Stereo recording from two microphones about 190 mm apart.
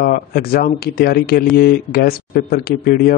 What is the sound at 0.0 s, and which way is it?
A man's voice, 50° left (ahead or behind).